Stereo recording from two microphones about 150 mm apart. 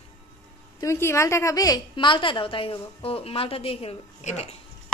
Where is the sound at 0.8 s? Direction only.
20° left (ahead or behind); by 4.6 s 45° left (ahead or behind).